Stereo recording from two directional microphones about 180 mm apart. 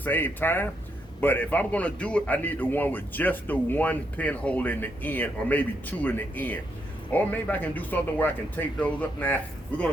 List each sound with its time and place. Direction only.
0.0 s a man's voice: 10° left (ahead or behind)